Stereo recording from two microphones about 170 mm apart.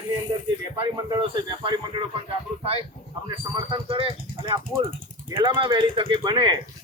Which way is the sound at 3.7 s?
30° right (ahead or behind).